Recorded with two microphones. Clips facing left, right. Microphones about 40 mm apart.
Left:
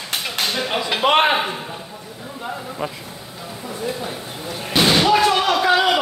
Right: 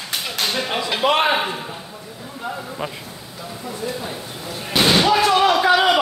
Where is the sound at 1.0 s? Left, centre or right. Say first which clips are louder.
Left 2 dB; left.